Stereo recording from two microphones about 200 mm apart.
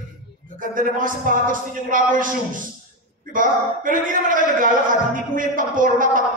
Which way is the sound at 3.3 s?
40° right (ahead or behind).